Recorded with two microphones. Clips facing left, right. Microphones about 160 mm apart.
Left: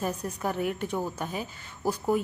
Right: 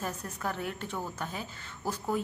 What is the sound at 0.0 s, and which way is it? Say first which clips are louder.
A woman's voice: left 5 dB; 15° left (ahead or behind).